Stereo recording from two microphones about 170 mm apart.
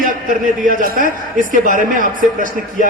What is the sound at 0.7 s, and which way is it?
A man's voice, 55° right (ahead or behind).